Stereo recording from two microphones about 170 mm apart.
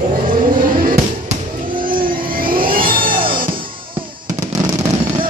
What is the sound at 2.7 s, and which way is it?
Music, 55° right (ahead or behind).